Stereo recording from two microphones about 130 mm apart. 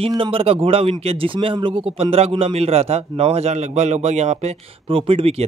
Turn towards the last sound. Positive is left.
turn(degrees=-45)  # may be behind; listen again after turning